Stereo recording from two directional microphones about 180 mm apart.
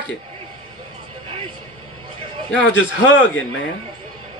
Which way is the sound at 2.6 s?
90° left.